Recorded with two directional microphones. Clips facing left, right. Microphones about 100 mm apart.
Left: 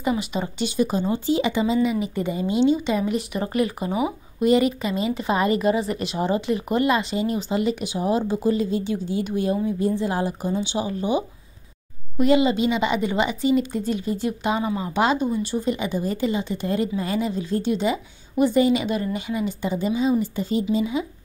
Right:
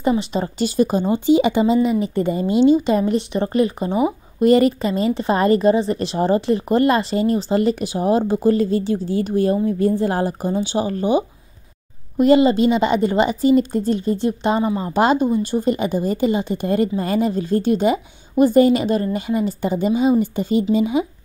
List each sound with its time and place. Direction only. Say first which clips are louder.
0.0 s speech: right 5 dB; 30° right (ahead or behind)
3.2 s speech: right 5 dB; 30° right (ahead or behind)
4.4 s speech: right 5 dB; 45° right (ahead or behind)
12.2 s a woman's voice: right 5 dB; 45° right (ahead or behind)
15.0 s speech: right 5 dB; 45° right (ahead or behind)